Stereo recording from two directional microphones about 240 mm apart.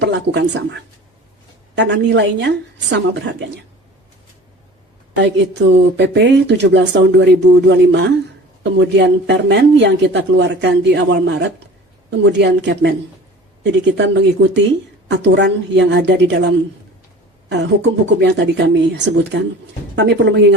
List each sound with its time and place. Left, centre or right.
0.0 s speech: right
5.1 s speech: right